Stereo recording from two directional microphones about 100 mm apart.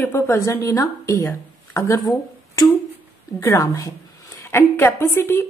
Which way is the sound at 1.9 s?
40° left (ahead or behind).